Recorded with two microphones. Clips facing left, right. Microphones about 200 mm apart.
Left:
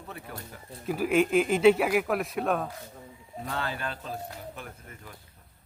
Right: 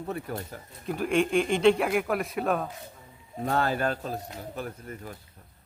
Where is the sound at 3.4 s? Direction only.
45° right (ahead or behind).